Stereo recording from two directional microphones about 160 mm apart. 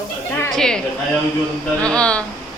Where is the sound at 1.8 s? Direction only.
5° left (ahead or behind).